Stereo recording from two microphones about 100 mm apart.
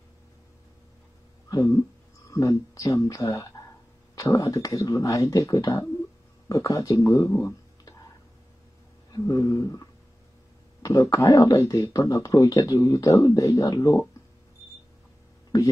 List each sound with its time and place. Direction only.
1.5 s a sound: 30° left (ahead or behind)
2.2 s speech: 35° left (ahead or behind)
9.1 s speech: 35° left (ahead or behind)